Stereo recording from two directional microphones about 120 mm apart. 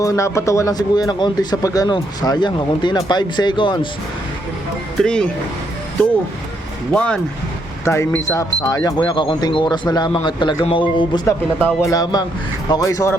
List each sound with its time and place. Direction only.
0.0 s speech: 25° left (ahead or behind)
4.9 s speech: 5° left (ahead or behind)
6.9 s speech: 10° left (ahead or behind)
7.9 s speech: 20° left (ahead or behind); by 11.2 s 45° left (ahead or behind)
11.3 s speech: 25° left (ahead or behind)